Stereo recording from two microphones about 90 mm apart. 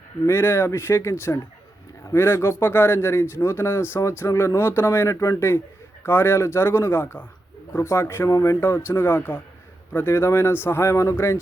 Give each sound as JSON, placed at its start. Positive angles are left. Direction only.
{"t": 0.3, "sound": "speech", "side_deg": 25}
{"t": 8.6, "sound": "speech", "side_deg": 25}